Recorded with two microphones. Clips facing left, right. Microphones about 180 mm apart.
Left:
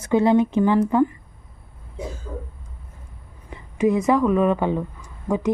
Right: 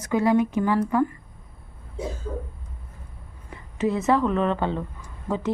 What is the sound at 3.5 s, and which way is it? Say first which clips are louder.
A woman's voice: left 5 dB; 15° left (ahead or behind).